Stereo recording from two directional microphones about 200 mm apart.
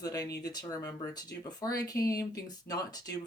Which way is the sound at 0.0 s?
15° left (ahead or behind).